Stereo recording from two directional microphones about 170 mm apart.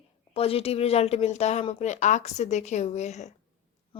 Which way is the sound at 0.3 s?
35° left (ahead or behind).